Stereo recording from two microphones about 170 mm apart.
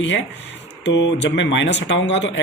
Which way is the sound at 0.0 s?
90° left.